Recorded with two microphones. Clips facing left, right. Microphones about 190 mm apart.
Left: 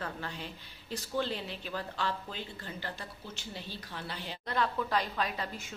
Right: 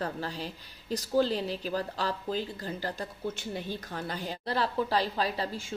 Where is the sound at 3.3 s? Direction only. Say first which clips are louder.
Right 6 dB; 50° right (ahead or behind); by 5.7 s 30° right (ahead or behind).